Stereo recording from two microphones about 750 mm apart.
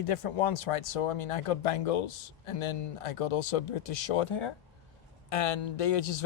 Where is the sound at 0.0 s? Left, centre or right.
Left.